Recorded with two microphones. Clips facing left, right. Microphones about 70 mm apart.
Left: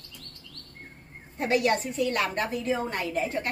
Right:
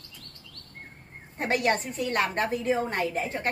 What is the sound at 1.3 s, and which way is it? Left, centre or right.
A woman's voice, right.